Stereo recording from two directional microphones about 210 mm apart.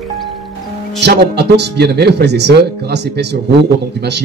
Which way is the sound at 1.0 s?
50° right (ahead or behind).